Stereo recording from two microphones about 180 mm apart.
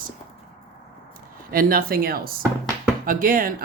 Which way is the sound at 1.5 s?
55° right (ahead or behind).